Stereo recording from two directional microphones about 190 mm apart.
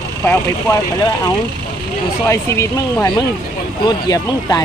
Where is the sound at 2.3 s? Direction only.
15° left (ahead or behind).